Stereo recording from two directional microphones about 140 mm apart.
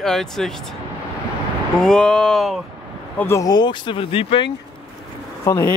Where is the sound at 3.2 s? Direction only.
20° left (ahead or behind); by 4.5 s 40° left (ahead or behind).